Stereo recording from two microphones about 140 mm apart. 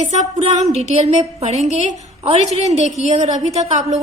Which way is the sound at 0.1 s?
55° right (ahead or behind).